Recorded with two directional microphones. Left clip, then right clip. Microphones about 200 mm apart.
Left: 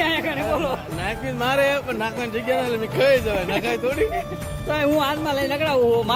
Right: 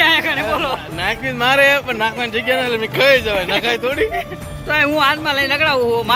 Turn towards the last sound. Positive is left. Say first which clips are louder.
# right 6 dB
turn(degrees=20)  # may be behind; listen again after turning